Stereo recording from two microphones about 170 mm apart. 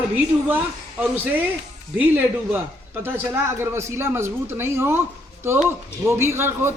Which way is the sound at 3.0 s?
15° right (ahead or behind).